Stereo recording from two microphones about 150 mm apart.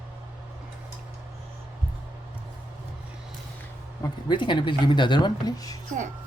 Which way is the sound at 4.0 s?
30° left (ahead or behind).